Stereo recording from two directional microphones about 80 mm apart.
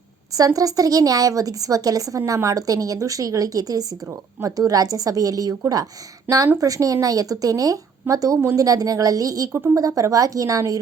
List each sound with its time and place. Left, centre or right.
0.3 s a woman's voice: right
9.5 s speech: right
9.7 s a woman's voice: right